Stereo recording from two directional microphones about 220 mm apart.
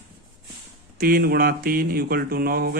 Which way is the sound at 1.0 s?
40° right (ahead or behind).